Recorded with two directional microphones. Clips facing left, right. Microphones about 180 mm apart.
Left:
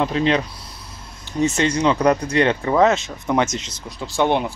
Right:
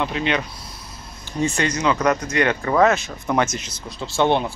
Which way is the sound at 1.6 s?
30° left (ahead or behind).